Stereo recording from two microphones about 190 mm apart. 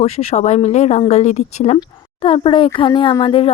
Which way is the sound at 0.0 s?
35° left (ahead or behind).